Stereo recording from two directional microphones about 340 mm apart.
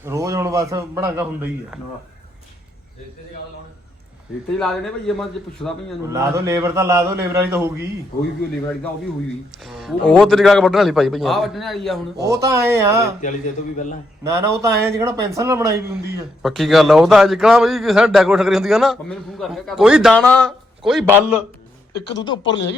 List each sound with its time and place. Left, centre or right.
0.0 s a man's voice: centre
4.5 s a man's voice: centre
9.6 s a man's voice: centre
14.3 s a man's voice: centre
21.9 s speech: left